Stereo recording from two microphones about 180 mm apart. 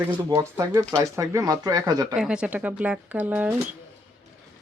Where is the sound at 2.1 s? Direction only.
5° right (ahead or behind).